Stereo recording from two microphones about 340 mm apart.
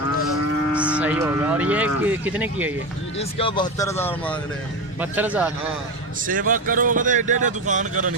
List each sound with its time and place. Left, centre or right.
0.7 s speech: centre
3.2 s speech: centre
5.1 s speech: centre
6.2 s speech: right